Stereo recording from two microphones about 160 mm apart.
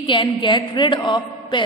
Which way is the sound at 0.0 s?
30° left (ahead or behind).